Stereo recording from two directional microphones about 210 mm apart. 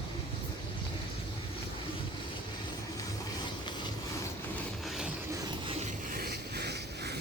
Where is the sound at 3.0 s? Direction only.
20° left (ahead or behind).